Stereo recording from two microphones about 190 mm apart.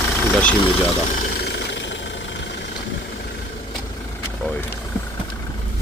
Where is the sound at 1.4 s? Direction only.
65° left (ahead or behind).